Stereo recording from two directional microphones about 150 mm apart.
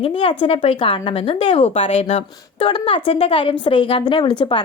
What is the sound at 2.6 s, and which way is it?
A woman's voice, 35° left (ahead or behind).